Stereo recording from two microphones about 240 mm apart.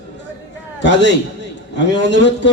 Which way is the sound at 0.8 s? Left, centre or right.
Left.